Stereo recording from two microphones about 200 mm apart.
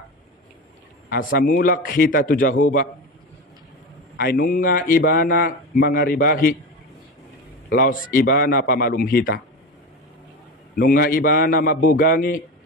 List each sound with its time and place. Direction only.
1.1 s speech: 50° left (ahead or behind)
4.2 s speech: 50° left (ahead or behind)
7.7 s speech: 45° left (ahead or behind)
10.8 s speech: 45° left (ahead or behind)